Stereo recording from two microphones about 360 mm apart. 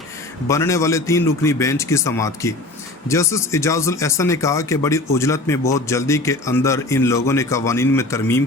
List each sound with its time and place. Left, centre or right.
0.4 s speech: centre